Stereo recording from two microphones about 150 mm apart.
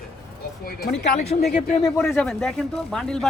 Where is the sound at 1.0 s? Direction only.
55° left (ahead or behind).